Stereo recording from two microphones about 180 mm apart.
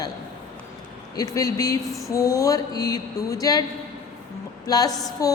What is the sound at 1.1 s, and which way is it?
Mantra, 20° left (ahead or behind).